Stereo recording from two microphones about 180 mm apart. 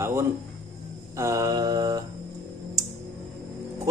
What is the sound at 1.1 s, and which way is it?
Mantra, 15° right (ahead or behind).